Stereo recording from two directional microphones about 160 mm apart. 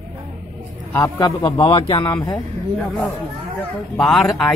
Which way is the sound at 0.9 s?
15° left (ahead or behind).